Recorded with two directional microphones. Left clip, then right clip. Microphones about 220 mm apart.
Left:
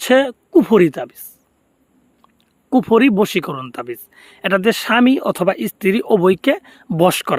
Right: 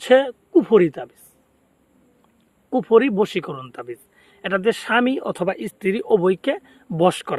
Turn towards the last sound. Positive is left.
turn(degrees=50)  # may be behind; listen again after turning